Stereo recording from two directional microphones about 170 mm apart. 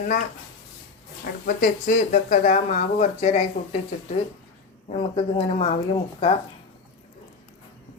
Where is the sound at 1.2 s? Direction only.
55° left (ahead or behind); by 3.4 s 40° left (ahead or behind).